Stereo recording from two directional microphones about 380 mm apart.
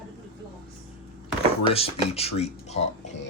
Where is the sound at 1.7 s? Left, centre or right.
Centre.